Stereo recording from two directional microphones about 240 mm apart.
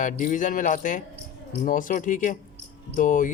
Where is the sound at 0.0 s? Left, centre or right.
Left.